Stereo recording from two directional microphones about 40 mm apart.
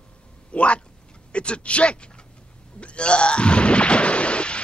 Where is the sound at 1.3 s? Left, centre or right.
Left.